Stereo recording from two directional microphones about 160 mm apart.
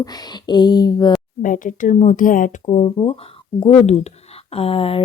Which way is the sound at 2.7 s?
40° left (ahead or behind).